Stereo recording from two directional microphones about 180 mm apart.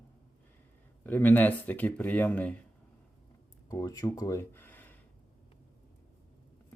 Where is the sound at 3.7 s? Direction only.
20° left (ahead or behind).